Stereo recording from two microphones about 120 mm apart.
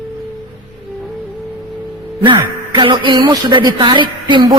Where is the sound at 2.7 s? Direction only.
40° right (ahead or behind).